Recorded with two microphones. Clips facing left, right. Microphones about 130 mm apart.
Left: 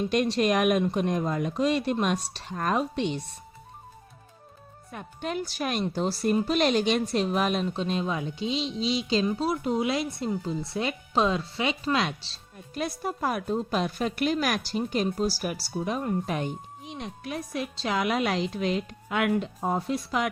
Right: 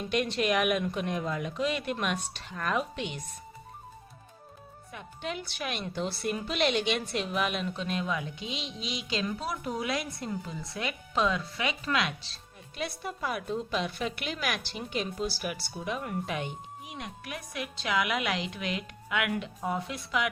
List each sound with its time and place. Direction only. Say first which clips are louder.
0.1 s speech: left 1 dB; 35° left (ahead or behind)
4.9 s speech: left 4 dB; 45° left (ahead or behind)
12.7 s speech: left 5 dB; 45° left (ahead or behind)
17.0 s speech: left 7 dB; 30° left (ahead or behind)